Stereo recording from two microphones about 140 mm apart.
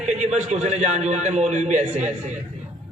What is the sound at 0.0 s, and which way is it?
A man's voice, 55° right (ahead or behind).